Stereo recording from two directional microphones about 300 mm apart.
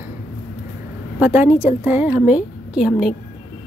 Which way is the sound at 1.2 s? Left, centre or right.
Centre.